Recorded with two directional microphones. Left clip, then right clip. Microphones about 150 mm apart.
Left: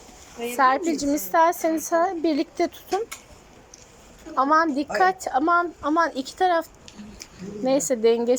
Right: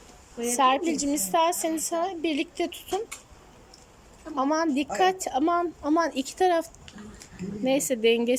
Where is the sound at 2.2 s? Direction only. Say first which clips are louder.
Left 5 dB; 40° left (ahead or behind).